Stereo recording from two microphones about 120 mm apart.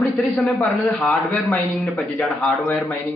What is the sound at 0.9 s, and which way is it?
A man's voice, 5° left (ahead or behind).